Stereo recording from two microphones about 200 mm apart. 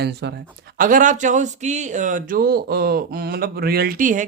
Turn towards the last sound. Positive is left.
turn(degrees=-40)  # may be behind; listen again after turning